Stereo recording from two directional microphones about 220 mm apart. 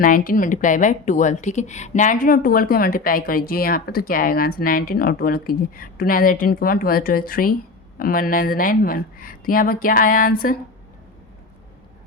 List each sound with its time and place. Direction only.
0.0 s a woman's voice: 40° left (ahead or behind)